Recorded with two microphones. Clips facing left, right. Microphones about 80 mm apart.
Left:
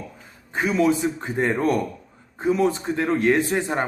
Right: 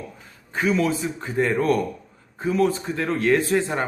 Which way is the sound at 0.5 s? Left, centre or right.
Centre.